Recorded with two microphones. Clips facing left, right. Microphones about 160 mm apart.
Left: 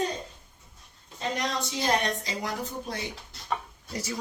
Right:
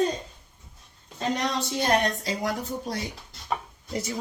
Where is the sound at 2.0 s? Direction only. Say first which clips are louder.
Right 4 dB; 45° right (ahead or behind).